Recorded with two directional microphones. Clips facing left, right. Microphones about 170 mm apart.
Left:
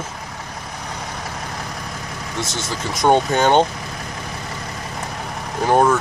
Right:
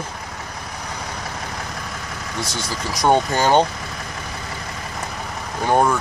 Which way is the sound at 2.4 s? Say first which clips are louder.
Left 1 dB; 20° left (ahead or behind).